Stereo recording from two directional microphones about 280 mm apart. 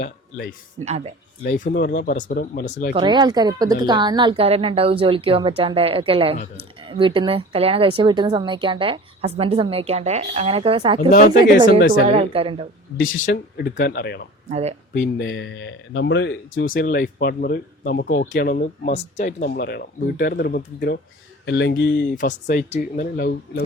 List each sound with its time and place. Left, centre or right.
0.0 s speech: left
0.9 s speech: right
1.5 s speech: left
2.9 s speech: centre
12.1 s speech: centre
13.2 s speech: left
14.5 s speech: right
15.2 s speech: left